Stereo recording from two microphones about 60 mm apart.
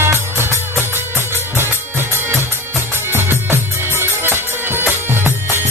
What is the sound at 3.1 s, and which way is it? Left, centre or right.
Music, right.